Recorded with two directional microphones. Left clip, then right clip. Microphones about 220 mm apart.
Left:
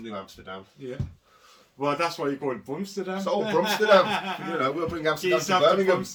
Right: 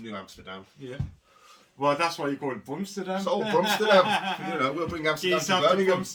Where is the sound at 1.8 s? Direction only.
15° right (ahead or behind).